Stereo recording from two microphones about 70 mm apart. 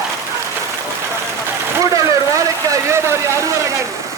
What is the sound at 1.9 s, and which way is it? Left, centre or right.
A man's voice, right.